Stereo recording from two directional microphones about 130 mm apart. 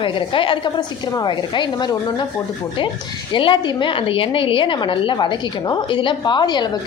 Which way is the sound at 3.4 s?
40° left (ahead or behind).